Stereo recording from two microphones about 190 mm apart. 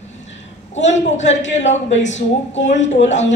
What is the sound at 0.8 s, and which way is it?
A woman's voice, 40° left (ahead or behind).